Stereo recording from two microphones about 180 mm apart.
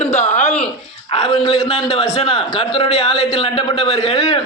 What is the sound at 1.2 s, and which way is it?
A man's voice, 30° left (ahead or behind).